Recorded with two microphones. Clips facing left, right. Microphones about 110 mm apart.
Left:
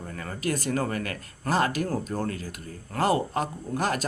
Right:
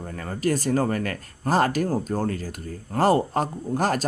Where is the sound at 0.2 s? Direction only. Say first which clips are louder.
Right 5 dB; 35° right (ahead or behind).